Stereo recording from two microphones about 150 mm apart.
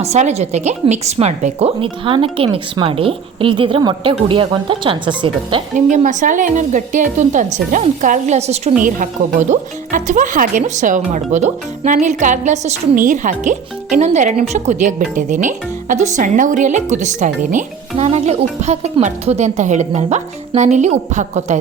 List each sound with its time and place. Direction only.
0.0 s a woman's voice: 45° right (ahead or behind)
5.7 s speech: 55° right (ahead or behind)
8.8 s speech: 60° right (ahead or behind)
17.9 s speech: 45° right (ahead or behind)